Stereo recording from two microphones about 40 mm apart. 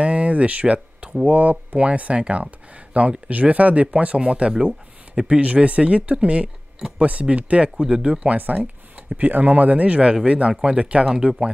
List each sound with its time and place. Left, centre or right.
0.0 s speech: right
8.4 s speech: right